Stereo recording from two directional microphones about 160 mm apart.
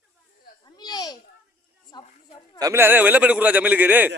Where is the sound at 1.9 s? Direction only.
25° left (ahead or behind).